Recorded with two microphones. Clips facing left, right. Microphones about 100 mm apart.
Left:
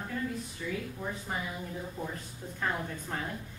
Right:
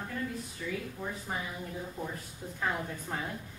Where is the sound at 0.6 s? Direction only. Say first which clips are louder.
Even; centre (ahead or behind).